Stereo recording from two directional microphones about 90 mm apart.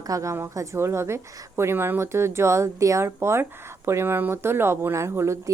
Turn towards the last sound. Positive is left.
turn(degrees=-30)  # may be behind; listen again after turning